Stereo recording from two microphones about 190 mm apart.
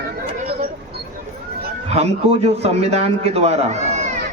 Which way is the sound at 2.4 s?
35° right (ahead or behind).